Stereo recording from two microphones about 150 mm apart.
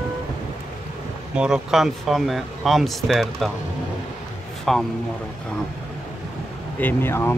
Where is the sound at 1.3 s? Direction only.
5° right (ahead or behind).